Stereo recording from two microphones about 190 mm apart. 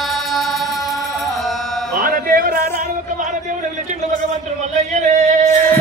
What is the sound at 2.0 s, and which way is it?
Speech, 50° right (ahead or behind).